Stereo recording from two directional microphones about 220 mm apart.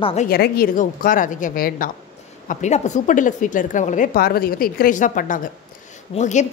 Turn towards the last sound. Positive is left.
turn(degrees=35)  # may be behind; listen again after turning